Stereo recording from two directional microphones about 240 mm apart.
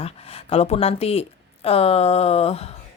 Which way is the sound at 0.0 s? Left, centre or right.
Left.